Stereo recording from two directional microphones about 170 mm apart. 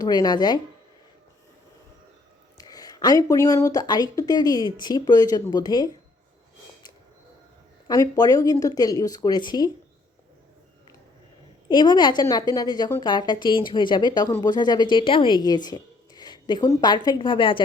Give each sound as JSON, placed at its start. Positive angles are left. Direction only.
{"t": 0.0, "sound": "speech", "side_deg": 25}
{"t": 2.6, "sound": "speech", "side_deg": 20}
{"t": 7.9, "sound": "speech", "side_deg": 20}
{"t": 11.7, "sound": "a woman's voice", "side_deg": 25}